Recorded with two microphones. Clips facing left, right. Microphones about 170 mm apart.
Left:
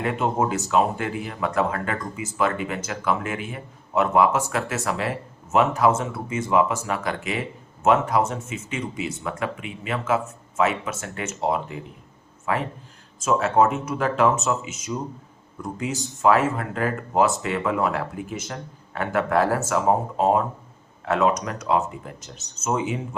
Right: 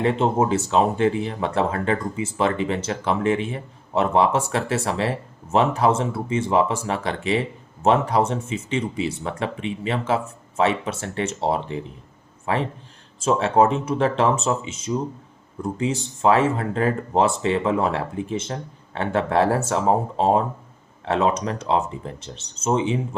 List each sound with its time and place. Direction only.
0.0 s speech: 25° right (ahead or behind)